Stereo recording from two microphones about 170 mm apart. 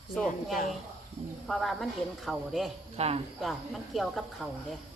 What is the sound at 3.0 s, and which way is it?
Speech, 35° right (ahead or behind).